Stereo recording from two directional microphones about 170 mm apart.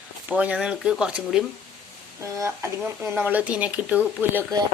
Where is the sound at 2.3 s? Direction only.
15° right (ahead or behind).